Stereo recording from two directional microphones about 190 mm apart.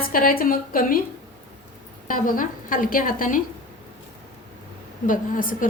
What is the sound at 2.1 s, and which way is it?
A woman's voice, 45° left (ahead or behind).